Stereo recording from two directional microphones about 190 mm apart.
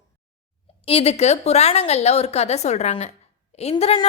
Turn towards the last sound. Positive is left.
turn(degrees=30)  # may be behind; listen again after turning